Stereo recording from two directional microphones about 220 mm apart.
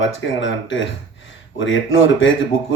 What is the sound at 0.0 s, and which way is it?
Speech, 60° left (ahead or behind).